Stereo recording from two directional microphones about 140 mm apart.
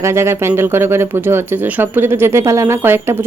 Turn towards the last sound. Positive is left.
turn(degrees=-15)  # may be behind; listen again after turning